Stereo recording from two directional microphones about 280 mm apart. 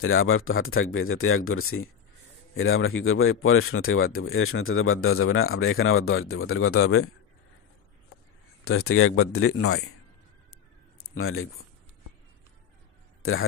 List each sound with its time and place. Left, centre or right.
0.0 s speech: left
8.6 s speech: left
11.0 s a sound: left
13.2 s speech: left